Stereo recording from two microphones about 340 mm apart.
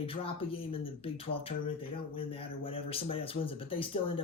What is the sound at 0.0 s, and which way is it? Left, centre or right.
Speech, centre.